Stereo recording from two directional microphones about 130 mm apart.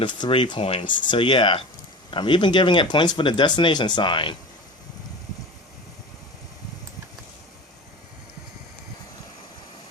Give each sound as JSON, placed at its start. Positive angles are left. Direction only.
{"t": 0.0, "sound": "speech", "side_deg": 40}